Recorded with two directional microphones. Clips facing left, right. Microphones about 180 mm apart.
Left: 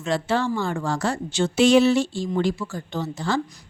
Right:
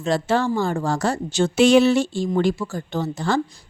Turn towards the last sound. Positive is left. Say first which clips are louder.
# right 3 dB
turn(degrees=-50)  # may be behind; listen again after turning